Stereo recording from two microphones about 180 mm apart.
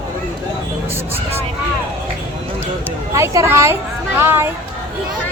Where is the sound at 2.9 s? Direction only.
15° right (ahead or behind).